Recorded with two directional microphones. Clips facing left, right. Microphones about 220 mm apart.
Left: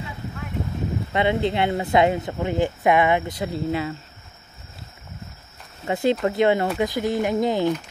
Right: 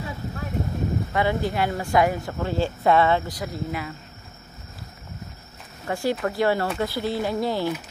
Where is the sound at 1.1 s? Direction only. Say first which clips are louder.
Left 4 dB; 20° left (ahead or behind).